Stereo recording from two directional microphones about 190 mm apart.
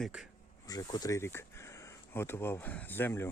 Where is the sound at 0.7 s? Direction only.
20° left (ahead or behind).